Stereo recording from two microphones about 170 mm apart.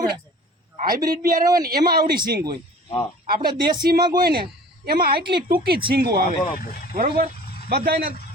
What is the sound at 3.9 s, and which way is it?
A man's voice, 65° right (ahead or behind).